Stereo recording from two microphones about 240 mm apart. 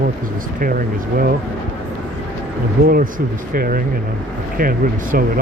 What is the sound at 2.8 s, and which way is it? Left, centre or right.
Speech, right.